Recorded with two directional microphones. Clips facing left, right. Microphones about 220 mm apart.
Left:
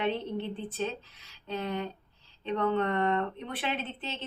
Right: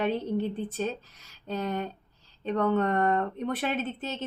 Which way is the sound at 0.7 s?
45° right (ahead or behind).